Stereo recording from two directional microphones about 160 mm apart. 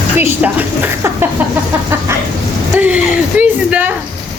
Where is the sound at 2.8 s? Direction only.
10° right (ahead or behind).